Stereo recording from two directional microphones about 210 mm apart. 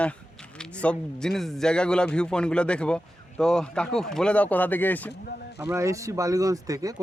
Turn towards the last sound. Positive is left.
turn(degrees=-15)  # may be behind; listen again after turning